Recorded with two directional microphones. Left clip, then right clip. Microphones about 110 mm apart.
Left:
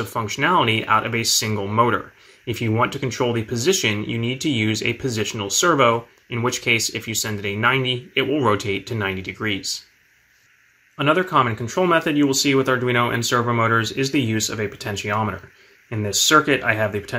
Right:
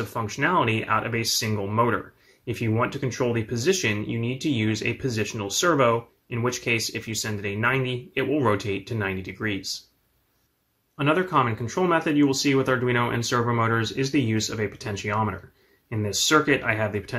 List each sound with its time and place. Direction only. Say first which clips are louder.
0.0 s speech: left 4 dB; 20° left (ahead or behind)
11.0 s speech: left 4 dB; 15° left (ahead or behind)